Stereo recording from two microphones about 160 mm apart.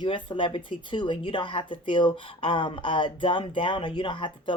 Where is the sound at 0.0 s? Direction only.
30° left (ahead or behind).